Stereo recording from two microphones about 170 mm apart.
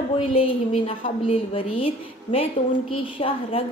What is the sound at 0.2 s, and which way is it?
A woman's voice, 35° left (ahead or behind).